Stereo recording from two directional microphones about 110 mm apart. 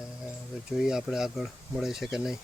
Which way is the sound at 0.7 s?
5° right (ahead or behind).